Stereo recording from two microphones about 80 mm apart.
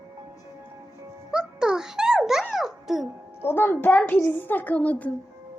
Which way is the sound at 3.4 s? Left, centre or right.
Left.